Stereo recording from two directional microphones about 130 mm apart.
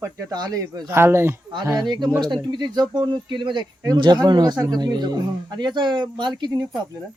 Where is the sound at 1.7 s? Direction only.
35° right (ahead or behind).